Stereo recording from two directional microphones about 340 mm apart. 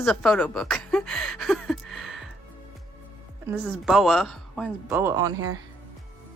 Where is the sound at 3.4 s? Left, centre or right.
Centre.